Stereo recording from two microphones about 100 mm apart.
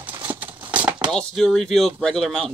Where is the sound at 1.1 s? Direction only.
5° left (ahead or behind).